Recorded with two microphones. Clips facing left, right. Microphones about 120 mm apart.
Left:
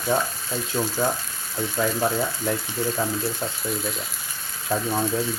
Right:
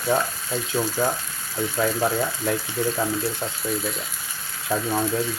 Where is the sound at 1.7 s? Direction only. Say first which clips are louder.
Right 1 dB; 5° right (ahead or behind).